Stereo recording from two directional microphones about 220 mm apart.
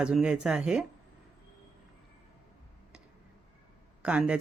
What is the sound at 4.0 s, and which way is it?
Speech, 5° right (ahead or behind).